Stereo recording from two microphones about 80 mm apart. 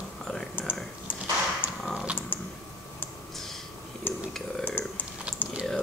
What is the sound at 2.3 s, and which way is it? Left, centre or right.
Typing, left.